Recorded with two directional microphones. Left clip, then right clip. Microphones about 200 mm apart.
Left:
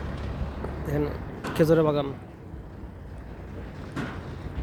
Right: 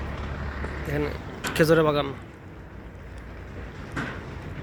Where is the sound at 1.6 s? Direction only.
5° left (ahead or behind).